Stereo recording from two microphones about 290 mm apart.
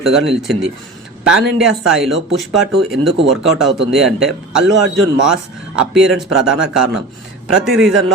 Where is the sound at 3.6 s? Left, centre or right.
Centre.